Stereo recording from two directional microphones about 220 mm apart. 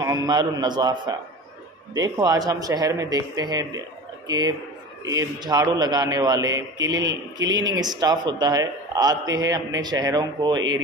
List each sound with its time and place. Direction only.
0.0 s a man's voice: 15° right (ahead or behind)